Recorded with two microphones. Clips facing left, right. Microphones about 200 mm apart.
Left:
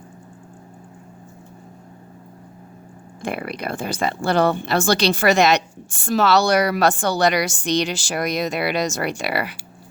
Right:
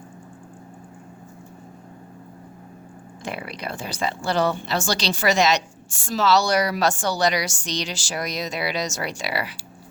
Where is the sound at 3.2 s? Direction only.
55° left (ahead or behind).